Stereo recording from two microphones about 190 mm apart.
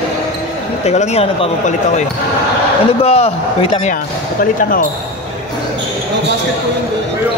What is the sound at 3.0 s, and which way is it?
Speech, 30° left (ahead or behind).